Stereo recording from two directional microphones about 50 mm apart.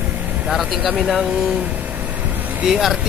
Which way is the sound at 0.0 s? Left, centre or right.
Right.